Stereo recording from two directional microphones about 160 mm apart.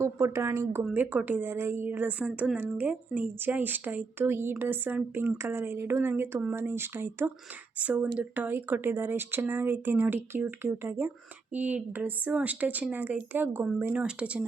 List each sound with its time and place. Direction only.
0.0 s a woman's voice: 15° right (ahead or behind)